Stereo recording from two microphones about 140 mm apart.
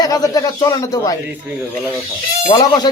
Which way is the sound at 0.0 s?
25° left (ahead or behind).